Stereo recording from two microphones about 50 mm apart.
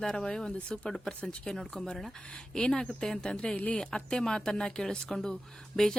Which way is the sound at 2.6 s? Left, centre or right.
Centre.